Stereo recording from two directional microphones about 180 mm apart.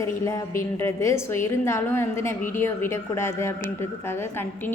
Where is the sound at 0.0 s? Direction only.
15° left (ahead or behind).